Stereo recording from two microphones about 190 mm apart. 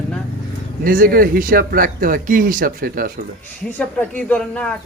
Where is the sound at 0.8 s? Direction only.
50° right (ahead or behind).